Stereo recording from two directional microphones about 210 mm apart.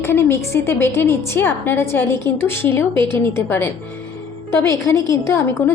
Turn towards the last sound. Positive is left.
turn(degrees=10)  # may be behind; listen again after turning